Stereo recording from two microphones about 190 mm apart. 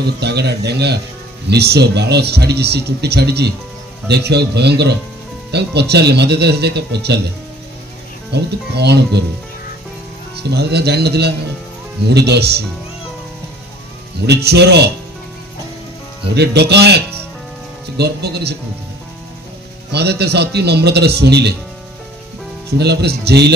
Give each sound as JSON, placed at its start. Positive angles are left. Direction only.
{"t": 0.0, "sound": "speech", "side_deg": -60}
{"t": 10.3, "sound": "speech", "side_deg": -60}
{"t": 14.2, "sound": "speech", "side_deg": -60}
{"t": 16.3, "sound": "speech", "side_deg": -60}
{"t": 19.9, "sound": "speech", "side_deg": -60}
{"t": 22.7, "sound": "speech", "side_deg": -60}